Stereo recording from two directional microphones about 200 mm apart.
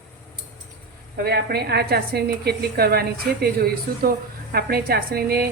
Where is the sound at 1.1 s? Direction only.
50° right (ahead or behind).